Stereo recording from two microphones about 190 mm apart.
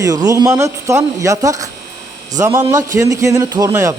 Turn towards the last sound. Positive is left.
turn(degrees=-15)  # may be behind; listen again after turning